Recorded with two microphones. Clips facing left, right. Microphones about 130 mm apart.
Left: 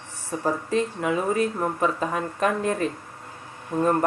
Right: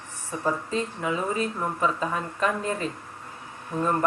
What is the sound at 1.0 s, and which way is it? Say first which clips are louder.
Speech: left 4 dB; 55° left (ahead or behind).